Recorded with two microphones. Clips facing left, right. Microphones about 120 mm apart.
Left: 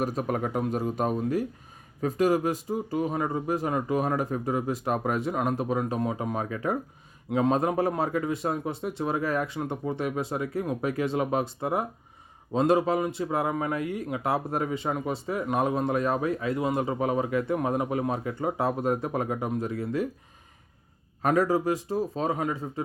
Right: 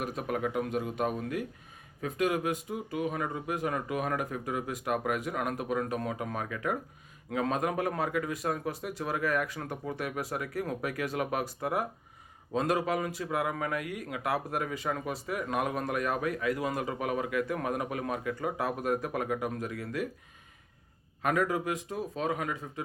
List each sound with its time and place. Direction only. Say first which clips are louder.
0.0 s a man's voice: left 4 dB; 35° left (ahead or behind)
21.2 s a man's voice: left 5 dB; 35° left (ahead or behind)